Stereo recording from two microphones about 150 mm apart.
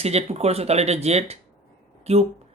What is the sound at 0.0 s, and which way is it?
Speech, 45° right (ahead or behind).